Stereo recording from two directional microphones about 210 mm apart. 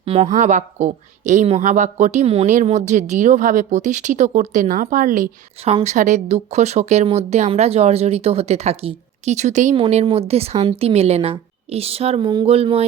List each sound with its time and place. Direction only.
0.0 s a woman's voice: 25° right (ahead or behind)